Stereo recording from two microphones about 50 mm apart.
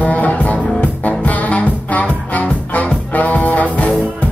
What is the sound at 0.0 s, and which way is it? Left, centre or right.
Music, left.